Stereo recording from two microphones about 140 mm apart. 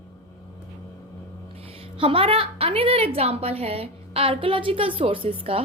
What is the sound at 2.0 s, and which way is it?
A woman's voice, 40° right (ahead or behind).